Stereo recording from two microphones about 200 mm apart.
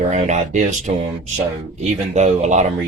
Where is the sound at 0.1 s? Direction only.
35° right (ahead or behind).